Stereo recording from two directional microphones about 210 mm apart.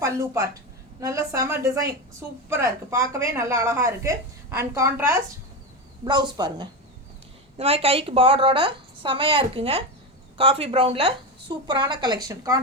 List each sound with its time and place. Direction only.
0.9 s a woman's voice: 15° right (ahead or behind)